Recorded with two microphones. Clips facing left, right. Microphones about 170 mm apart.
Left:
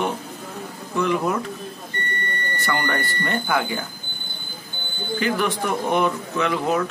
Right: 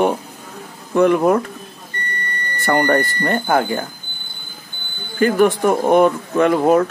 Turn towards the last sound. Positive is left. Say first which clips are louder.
# right 8 dB
turn(degrees=-50)  # may be behind; listen again after turning